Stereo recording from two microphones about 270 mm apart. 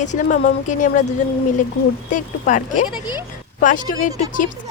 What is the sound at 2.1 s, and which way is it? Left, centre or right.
A woman's voice, left.